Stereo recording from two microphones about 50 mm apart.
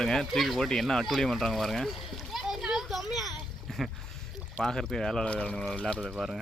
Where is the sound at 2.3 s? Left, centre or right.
Centre.